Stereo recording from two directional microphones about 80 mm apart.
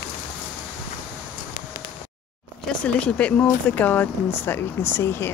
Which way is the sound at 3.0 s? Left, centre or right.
Centre.